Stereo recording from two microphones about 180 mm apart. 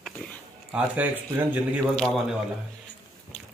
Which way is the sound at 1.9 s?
5° left (ahead or behind).